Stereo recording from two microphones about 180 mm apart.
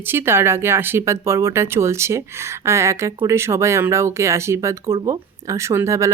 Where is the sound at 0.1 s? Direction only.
15° right (ahead or behind).